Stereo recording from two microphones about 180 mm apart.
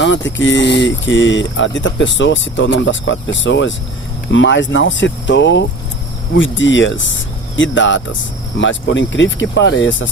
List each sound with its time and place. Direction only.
0.0 s speech: 90° left